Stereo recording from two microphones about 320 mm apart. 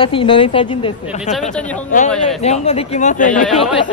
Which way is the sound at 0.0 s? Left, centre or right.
Centre.